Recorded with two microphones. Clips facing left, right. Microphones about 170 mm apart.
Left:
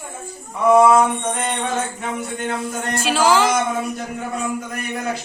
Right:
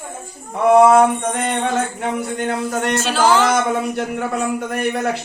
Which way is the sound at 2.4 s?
75° right (ahead or behind).